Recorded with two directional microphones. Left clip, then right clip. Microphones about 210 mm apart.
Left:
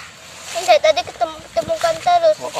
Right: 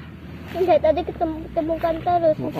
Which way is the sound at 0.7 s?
5° left (ahead or behind).